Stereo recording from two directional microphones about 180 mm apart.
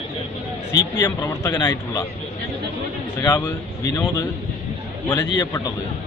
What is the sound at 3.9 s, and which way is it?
A man's voice, 20° left (ahead or behind).